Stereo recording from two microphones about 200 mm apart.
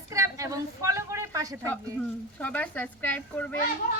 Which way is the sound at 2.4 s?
10° left (ahead or behind).